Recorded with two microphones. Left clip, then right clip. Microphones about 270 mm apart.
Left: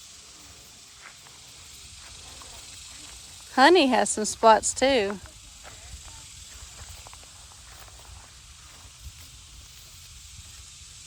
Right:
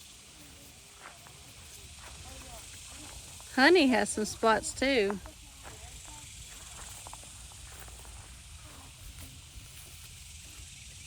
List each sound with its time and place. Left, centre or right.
3.5 s speech: centre